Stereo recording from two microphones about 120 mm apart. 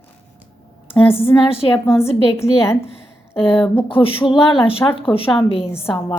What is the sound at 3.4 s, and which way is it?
A woman's voice, 50° left (ahead or behind).